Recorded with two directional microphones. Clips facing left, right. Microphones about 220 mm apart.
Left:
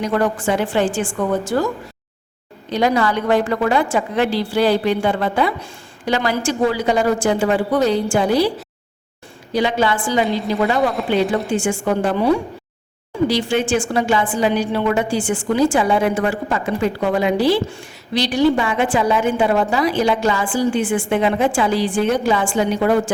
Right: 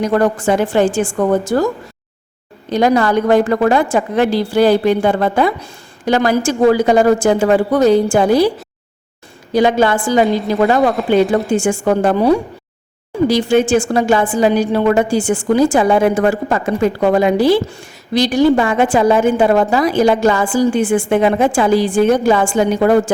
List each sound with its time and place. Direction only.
0.0 s a woman's voice: 45° right (ahead or behind)
2.6 s a woman's voice: 45° right (ahead or behind)
9.5 s a woman's voice: 45° right (ahead or behind)